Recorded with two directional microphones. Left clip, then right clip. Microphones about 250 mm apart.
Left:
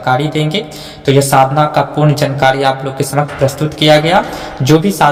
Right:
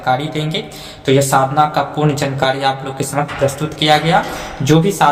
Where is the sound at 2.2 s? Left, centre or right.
Left.